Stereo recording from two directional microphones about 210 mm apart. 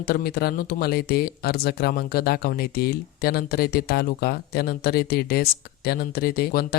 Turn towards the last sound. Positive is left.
turn(degrees=45)  # may be behind; listen again after turning